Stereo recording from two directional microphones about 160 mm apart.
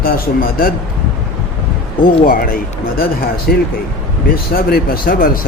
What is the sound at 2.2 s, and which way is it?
Speech, 60° left (ahead or behind).